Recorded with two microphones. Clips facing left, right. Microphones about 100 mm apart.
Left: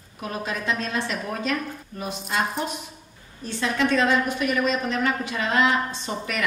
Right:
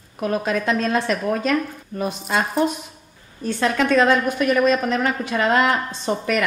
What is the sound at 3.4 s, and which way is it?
A woman's voice, 60° right (ahead or behind).